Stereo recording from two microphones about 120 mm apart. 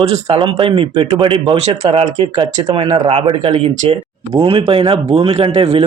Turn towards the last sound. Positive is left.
turn(degrees=-60)  # may be behind; listen again after turning